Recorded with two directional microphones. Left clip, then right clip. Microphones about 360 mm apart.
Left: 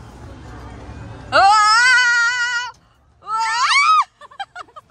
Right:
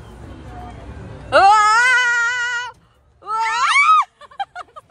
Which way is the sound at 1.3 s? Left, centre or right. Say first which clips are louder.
Right 1 dB; centre.